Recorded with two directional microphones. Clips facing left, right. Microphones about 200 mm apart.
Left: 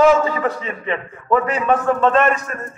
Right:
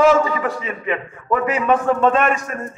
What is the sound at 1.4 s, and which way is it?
A man's voice, 10° right (ahead or behind).